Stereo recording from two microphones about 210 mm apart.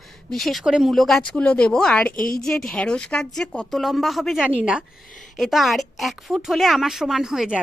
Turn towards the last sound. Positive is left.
turn(degrees=0)  # may be behind; listen again after turning